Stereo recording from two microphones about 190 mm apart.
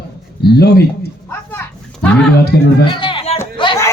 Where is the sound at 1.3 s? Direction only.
10° left (ahead or behind).